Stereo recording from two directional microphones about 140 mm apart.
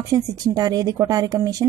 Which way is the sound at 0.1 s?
25° right (ahead or behind).